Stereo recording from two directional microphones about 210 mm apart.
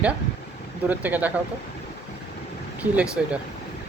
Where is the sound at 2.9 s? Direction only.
5° right (ahead or behind).